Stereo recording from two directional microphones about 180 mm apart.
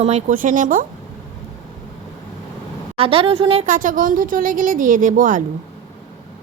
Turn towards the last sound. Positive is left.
turn(degrees=-45)  # may be behind; listen again after turning